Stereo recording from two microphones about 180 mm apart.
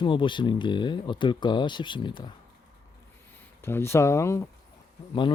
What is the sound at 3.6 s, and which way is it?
Speech, 15° left (ahead or behind).